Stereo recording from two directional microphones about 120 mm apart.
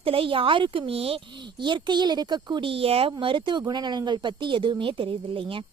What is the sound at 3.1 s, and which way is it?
A woman's voice, 40° right (ahead or behind).